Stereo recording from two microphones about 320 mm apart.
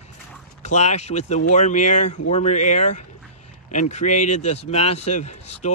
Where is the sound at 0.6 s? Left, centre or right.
Left.